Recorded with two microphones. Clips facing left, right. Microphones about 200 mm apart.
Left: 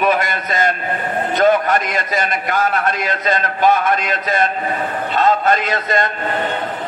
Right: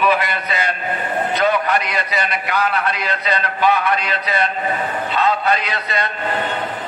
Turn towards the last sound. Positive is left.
turn(degrees=45)  # may be behind; listen again after turning